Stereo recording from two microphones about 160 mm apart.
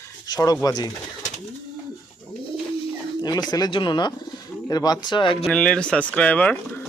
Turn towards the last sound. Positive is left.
turn(degrees=10)  # may be behind; listen again after turning